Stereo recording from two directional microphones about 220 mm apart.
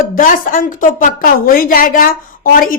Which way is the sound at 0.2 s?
40° left (ahead or behind).